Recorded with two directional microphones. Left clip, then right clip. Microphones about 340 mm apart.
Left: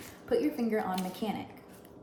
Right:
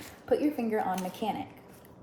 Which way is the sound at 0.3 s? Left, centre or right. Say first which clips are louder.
Right 2 dB; centre.